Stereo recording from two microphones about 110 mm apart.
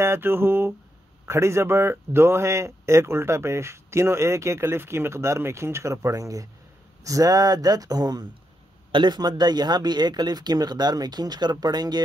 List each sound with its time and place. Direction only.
0.0 s speech: 20° right (ahead or behind); by 12.0 s 40° right (ahead or behind)